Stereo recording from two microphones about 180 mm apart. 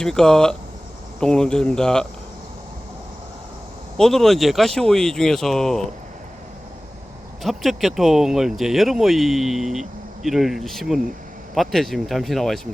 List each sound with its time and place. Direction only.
0.0 s speech: 5° left (ahead or behind)
3.9 s speech: centre (ahead or behind)
7.4 s speech: centre (ahead or behind)